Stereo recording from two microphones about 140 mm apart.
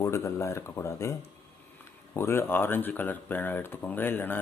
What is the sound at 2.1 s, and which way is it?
Speech, 20° left (ahead or behind).